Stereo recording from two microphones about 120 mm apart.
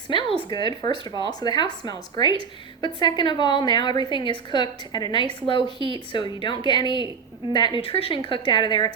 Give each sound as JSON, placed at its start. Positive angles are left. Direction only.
{"t": 0.1, "sound": "a woman's voice", "side_deg": 45}
{"t": 7.9, "sound": "speech", "side_deg": 50}
{"t": 8.3, "sound": "a woman's voice", "side_deg": 40}